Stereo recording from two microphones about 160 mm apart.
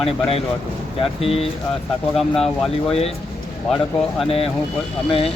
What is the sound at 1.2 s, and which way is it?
Speech, 40° left (ahead or behind).